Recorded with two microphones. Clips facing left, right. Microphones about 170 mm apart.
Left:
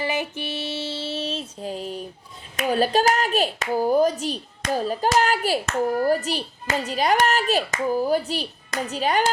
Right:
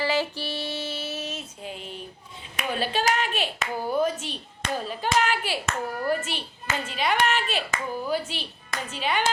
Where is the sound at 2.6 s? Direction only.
40° left (ahead or behind).